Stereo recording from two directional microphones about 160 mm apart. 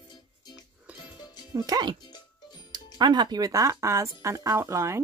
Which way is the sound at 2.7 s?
25° right (ahead or behind).